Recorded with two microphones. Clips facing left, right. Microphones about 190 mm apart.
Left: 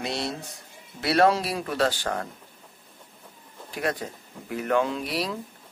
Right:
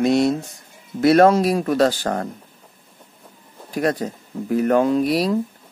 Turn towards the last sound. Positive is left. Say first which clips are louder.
# right 11 dB
turn(degrees=-40)  # may be behind; listen again after turning